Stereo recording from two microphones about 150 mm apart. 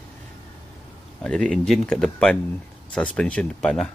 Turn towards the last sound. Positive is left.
turn(degrees=5)  # may be behind; listen again after turning